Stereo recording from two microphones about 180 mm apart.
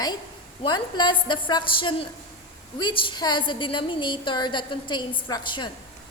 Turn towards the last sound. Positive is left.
turn(degrees=25)  # may be behind; listen again after turning